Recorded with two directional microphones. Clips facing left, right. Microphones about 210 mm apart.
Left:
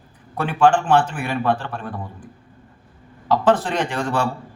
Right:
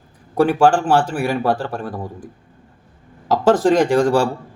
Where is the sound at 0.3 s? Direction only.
40° right (ahead or behind).